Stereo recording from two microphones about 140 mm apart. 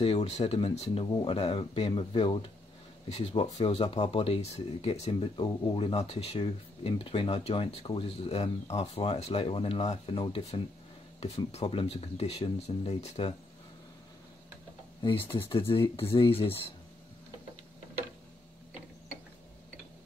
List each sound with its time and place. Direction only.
0.0 s speech: 45° left (ahead or behind)
3.1 s speech: 50° left (ahead or behind)
11.6 s speech: 40° left (ahead or behind)
15.0 s speech: 35° left (ahead or behind)